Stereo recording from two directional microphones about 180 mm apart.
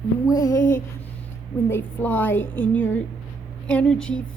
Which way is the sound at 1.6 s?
10° left (ahead or behind).